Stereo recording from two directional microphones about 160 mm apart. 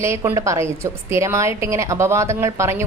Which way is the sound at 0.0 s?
15° right (ahead or behind).